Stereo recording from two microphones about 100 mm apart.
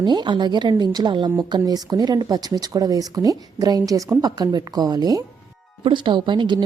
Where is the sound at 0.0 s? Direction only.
45° right (ahead or behind).